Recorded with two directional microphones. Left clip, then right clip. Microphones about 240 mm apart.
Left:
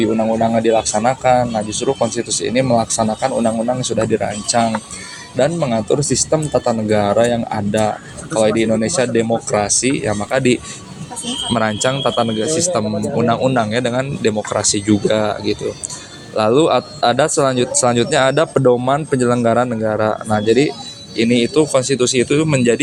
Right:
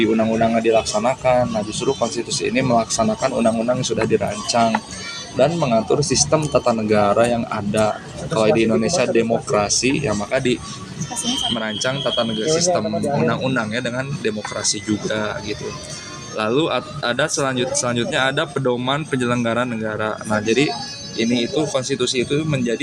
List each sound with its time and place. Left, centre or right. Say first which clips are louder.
0.0 s speech: left 2 dB; centre
18.5 s speech: left 7 dB; centre
21.2 s speech: left 6 dB; left